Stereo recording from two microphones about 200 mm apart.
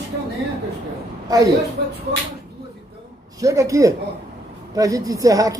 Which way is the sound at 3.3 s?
15° right (ahead or behind).